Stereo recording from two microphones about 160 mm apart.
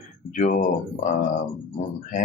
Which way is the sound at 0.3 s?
55° left (ahead or behind).